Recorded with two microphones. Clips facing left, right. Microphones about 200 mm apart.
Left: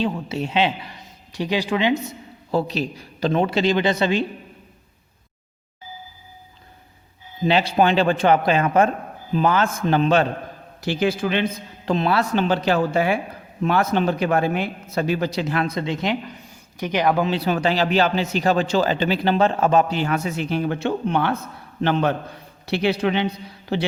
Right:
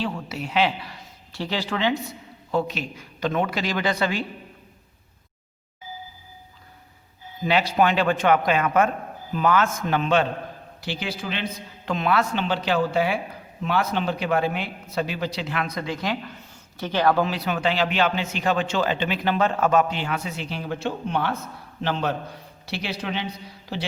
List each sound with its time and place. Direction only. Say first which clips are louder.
0.0 s speech: left 5 dB; 25° left (ahead or behind)
2.5 s speech: left 3 dB; 35° left (ahead or behind)
7.4 s speech: left 3 dB; 30° left (ahead or behind)
10.8 s a man's voice: left 9 dB; 50° left (ahead or behind)
11.9 s a man's voice: left 3 dB; 35° left (ahead or behind)
15.6 s speech: left 4 dB; 25° left (ahead or behind)
17.3 s speech: left 4 dB; 35° left (ahead or behind)
20.0 s a man's voice: left 6 dB; 45° left (ahead or behind)